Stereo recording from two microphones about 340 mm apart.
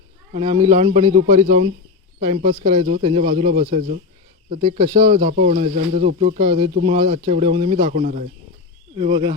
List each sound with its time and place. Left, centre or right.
0.3 s speech: centre